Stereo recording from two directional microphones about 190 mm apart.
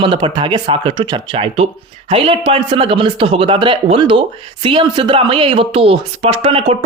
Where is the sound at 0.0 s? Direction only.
25° right (ahead or behind).